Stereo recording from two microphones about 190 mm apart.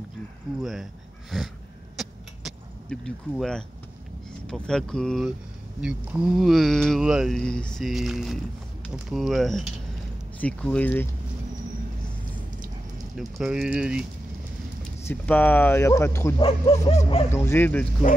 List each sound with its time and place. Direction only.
0.6 s speech: centre (ahead or behind)
2.0 s vehicle: centre (ahead or behind)
4.5 s speech: 5° left (ahead or behind)
13.1 s speech: centre (ahead or behind)
15.0 s speech: 10° left (ahead or behind)
16.3 s speech: 30° left (ahead or behind)
17.3 s speech: 15° left (ahead or behind)